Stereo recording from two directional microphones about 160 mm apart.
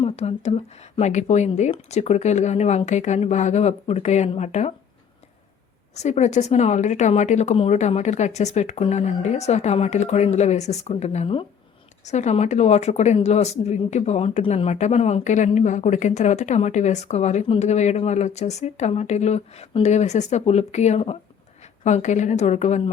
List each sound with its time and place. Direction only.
0.0 s speech: 40° left (ahead or behind)
5.9 s speech: 45° left (ahead or behind)